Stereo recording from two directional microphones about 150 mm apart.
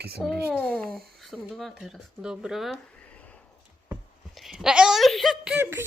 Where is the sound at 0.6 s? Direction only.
10° left (ahead or behind).